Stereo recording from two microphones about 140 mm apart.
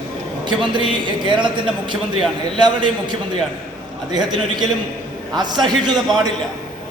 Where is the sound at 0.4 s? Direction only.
35° right (ahead or behind).